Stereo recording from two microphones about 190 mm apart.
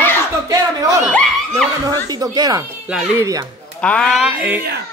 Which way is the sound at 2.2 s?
20° right (ahead or behind).